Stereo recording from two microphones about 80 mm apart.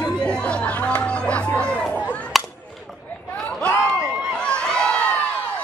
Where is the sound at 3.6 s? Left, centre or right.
Left.